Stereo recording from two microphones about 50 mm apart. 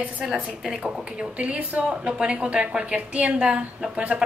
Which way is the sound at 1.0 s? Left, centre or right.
Right.